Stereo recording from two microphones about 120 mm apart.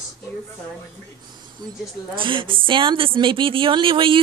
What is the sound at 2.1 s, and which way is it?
A woman's voice, 45° right (ahead or behind).